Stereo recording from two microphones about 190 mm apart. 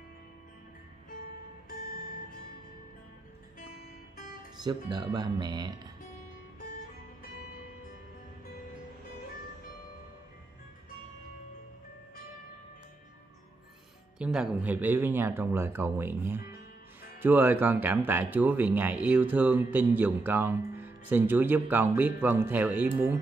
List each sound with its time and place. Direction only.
4.6 s speech: 20° right (ahead or behind)
14.1 s speech: 5° right (ahead or behind)